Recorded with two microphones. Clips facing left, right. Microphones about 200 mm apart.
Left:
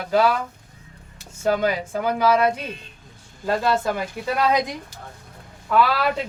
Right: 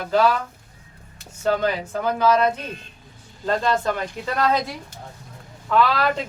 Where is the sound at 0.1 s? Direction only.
10° left (ahead or behind).